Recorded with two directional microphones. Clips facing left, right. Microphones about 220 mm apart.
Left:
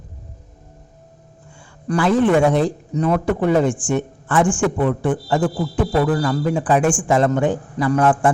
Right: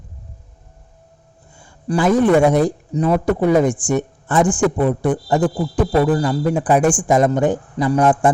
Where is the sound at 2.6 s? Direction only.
40° right (ahead or behind).